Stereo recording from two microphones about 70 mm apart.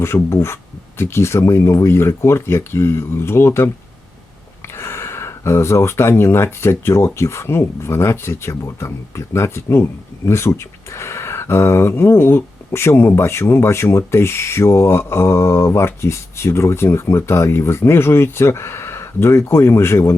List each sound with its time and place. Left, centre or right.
0.0 s speech: left
4.8 s speech: left